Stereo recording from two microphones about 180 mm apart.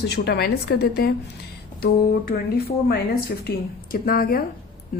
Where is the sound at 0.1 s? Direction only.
65° left (ahead or behind).